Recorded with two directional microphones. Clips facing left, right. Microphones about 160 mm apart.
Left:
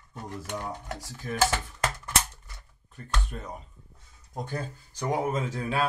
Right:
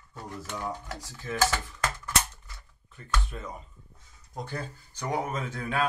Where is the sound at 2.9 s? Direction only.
40° left (ahead or behind).